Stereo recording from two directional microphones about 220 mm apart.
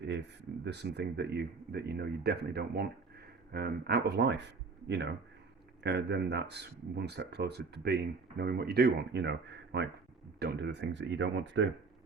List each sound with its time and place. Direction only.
0.0 s speech: 50° right (ahead or behind)
5.8 s speech: 50° right (ahead or behind)